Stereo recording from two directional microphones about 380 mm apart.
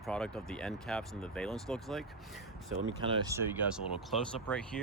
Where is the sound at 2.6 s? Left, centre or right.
Right.